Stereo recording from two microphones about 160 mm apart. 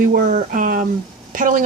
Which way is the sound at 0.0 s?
65° right (ahead or behind).